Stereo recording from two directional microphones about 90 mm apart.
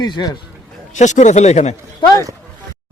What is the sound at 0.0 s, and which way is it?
Speech, 50° left (ahead or behind).